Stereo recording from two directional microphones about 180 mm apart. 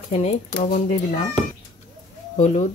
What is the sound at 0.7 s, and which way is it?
Speech, 45° left (ahead or behind).